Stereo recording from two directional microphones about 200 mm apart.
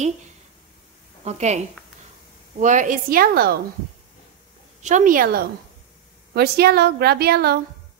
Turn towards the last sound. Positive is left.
turn(degrees=-50)  # may be behind; listen again after turning